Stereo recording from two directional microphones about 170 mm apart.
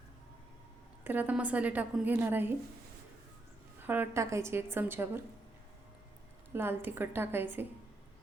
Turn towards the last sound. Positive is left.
turn(degrees=-10)  # may be behind; listen again after turning